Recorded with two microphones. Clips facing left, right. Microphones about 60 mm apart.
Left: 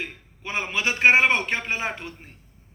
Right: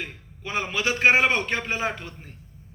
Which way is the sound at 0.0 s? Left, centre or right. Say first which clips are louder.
Left 1 dB; left.